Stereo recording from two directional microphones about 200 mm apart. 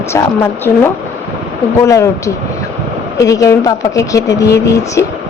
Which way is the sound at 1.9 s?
15° left (ahead or behind).